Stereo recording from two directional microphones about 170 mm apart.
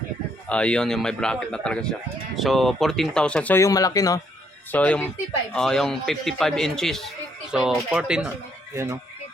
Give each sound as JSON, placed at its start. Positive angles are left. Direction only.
{"t": 0.4, "sound": "speech", "side_deg": 5}
{"t": 4.7, "sound": "speech", "side_deg": 10}
{"t": 8.7, "sound": "speech", "side_deg": -15}